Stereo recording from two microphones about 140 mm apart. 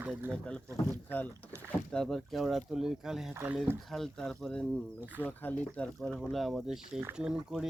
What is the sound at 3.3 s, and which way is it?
Speech, 15° right (ahead or behind).